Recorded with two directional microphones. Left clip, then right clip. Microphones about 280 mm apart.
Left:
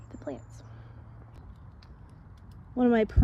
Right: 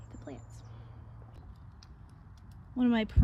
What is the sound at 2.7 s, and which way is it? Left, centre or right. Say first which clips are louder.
Speech: left 6 dB; centre.